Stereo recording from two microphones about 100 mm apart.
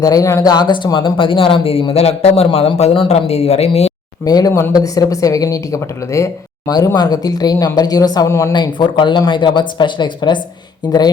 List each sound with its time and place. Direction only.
0.0 s a woman's voice: 35° left (ahead or behind)
0.5 s speech: 50° left (ahead or behind); by 3.9 s 90° left
4.3 s a woman's voice: 40° left (ahead or behind)
6.7 s a woman's voice: 40° left (ahead or behind)
8.3 s speech: 30° left (ahead or behind)
8.5 s speech: 50° left (ahead or behind)